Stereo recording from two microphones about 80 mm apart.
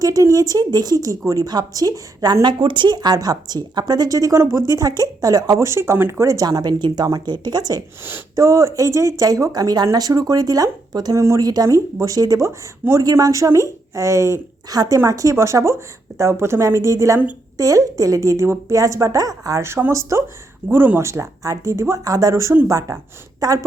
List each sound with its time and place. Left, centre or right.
0.0 s speech: right
0.9 s speech: right
8.4 s speech: right
11.1 s a woman's voice: right
11.4 s a woman's voice: right
19.6 s a woman's voice: right
20.7 s speech: right
21.1 s a woman's voice: right